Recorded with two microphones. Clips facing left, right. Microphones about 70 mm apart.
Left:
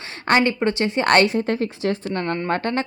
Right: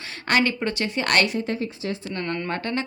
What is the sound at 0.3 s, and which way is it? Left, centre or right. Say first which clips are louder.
A woman's voice: left 4 dB; left.